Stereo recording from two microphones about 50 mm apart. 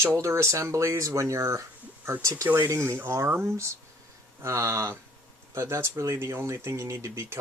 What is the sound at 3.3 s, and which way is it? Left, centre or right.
Speech, right.